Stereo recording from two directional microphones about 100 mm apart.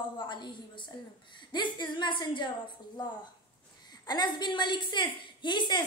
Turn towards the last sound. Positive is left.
turn(degrees=50)  # may be behind; listen again after turning